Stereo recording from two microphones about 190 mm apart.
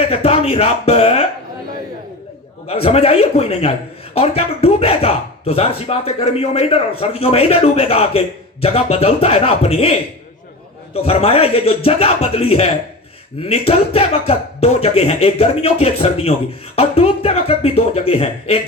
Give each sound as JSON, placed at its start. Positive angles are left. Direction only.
{"t": 0.1, "sound": "speech", "side_deg": 30}
{"t": 2.6, "sound": "speech", "side_deg": 30}